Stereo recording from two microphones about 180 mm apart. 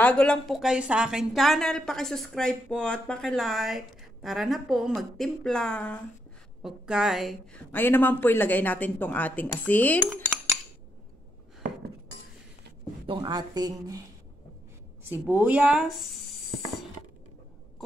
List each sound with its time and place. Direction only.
0.0 s a woman's voice: 5° left (ahead or behind)
7.7 s speech: 10° left (ahead or behind)
13.0 s speech: 25° right (ahead or behind)
15.0 s a woman's voice: 10° right (ahead or behind)